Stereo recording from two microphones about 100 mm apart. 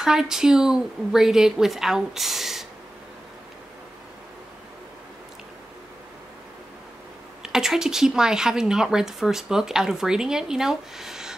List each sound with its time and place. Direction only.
0.0 s a woman's voice: 5° right (ahead or behind)
7.4 s a woman's voice: 5° right (ahead or behind)